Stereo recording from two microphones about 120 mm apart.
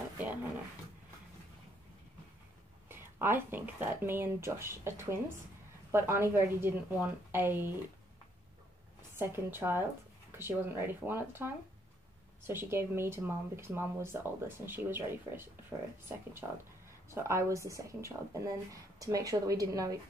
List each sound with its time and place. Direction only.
0.2 s speech: 15° right (ahead or behind)
2.9 s speech: 20° right (ahead or behind)
9.2 s speech: 20° right (ahead or behind)